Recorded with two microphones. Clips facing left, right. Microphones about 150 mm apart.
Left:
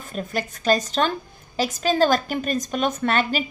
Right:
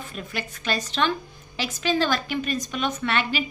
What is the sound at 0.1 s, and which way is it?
A woman's voice, 40° left (ahead or behind).